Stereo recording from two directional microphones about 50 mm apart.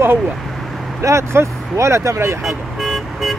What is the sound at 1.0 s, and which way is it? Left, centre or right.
Speech, right.